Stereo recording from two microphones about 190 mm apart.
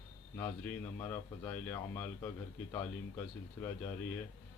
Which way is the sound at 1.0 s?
20° left (ahead or behind).